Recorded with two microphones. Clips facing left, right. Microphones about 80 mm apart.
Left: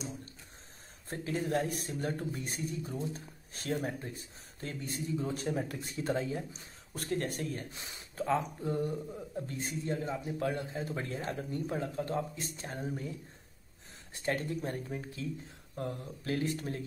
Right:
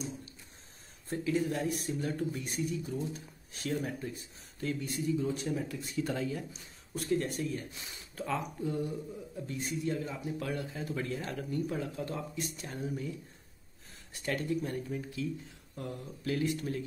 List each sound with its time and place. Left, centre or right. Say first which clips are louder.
1.0 s speech: right 4 dB; left
6.9 s speech: right 3 dB; left
14.1 s speech: right 1 dB; left